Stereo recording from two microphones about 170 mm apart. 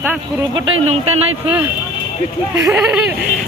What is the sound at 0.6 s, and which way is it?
Speech, 35° right (ahead or behind).